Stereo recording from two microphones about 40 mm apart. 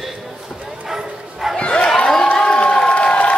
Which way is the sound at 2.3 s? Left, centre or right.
Left.